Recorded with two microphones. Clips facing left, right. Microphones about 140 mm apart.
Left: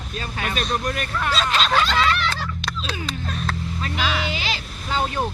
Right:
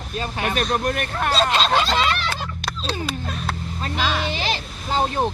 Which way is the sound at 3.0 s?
10° right (ahead or behind).